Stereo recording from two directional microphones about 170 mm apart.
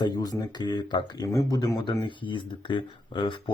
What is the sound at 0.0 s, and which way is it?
Speech, 25° left (ahead or behind).